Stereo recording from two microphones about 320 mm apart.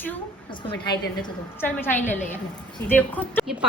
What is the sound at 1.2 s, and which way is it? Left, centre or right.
A woman's voice, centre.